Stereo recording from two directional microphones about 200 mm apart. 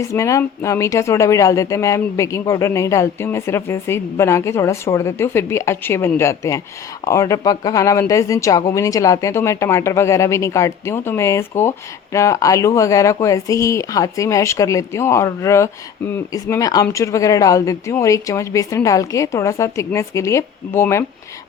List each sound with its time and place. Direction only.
0.0 s speech: 15° left (ahead or behind)